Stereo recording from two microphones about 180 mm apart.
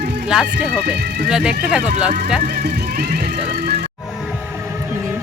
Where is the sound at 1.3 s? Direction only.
5° right (ahead or behind).